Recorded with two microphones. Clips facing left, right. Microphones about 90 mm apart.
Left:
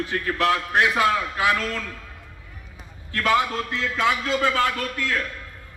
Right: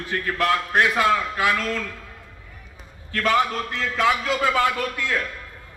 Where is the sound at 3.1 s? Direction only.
5° left (ahead or behind).